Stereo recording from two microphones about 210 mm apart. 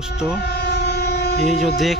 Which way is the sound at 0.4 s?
50° left (ahead or behind).